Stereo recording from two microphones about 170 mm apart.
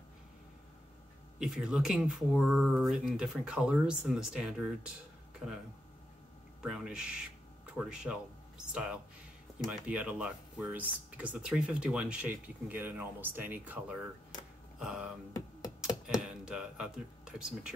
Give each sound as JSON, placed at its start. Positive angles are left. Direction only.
{"t": 1.4, "sound": "speech", "side_deg": -5}
{"t": 6.6, "sound": "speech", "side_deg": -5}
{"t": 14.8, "sound": "a sound", "side_deg": -5}
{"t": 15.8, "sound": "computer keyboard", "side_deg": -5}